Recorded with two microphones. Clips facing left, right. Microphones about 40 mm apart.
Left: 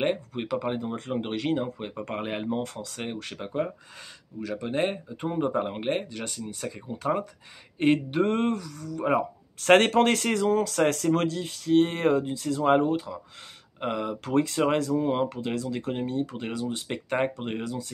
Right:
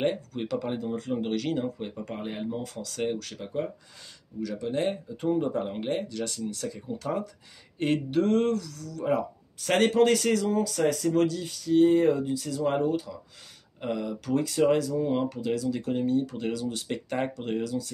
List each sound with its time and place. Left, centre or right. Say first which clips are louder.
0.0 s speech: left 1 dB; left
0.9 s speech: right 1 dB; left
2.1 s speech: left 4 dB; left
2.8 s speech: right 5 dB; left
3.2 s speech: left 2 dB; left
9.6 s speech: left 3 dB; left
12.3 s speech: left 4 dB; left
15.0 s speech: left 1 dB; left
15.2 s speech: right 2 dB; left